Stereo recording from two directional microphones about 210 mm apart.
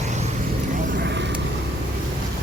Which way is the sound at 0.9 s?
55° right (ahead or behind).